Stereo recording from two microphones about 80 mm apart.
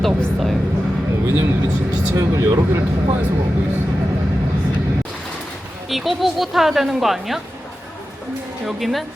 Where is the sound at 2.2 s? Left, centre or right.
Right.